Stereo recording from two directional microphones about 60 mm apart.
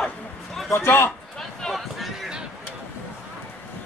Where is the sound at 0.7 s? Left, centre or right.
Left.